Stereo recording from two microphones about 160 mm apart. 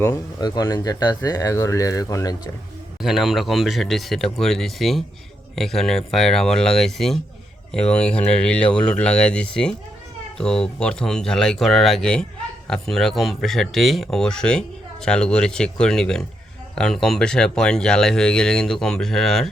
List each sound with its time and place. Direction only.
0.3 s speech: 25° left (ahead or behind)
3.0 s speech: centre (ahead or behind)